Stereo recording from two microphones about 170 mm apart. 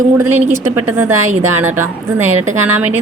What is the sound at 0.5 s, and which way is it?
A woman's voice, 10° right (ahead or behind).